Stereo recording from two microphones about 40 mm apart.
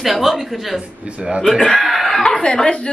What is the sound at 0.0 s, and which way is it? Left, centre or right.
Speech, centre.